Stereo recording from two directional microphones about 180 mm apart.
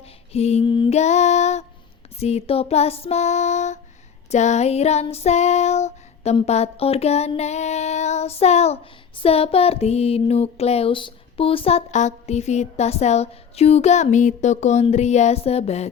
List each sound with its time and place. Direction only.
0.3 s child singing: 35° left (ahead or behind)